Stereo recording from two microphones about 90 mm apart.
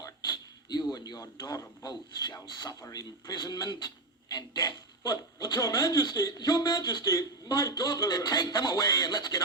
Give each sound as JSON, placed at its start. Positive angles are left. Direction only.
{"t": 0.0, "sound": "a sound", "side_deg": 45}
{"t": 0.9, "sound": "speech", "side_deg": 45}
{"t": 7.0, "sound": "speech", "side_deg": 40}